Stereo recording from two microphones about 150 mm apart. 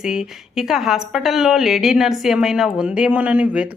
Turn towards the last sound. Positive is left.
turn(degrees=-10)  # may be behind; listen again after turning